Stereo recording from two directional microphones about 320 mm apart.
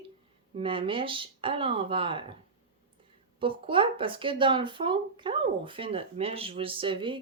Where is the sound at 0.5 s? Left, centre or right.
Centre.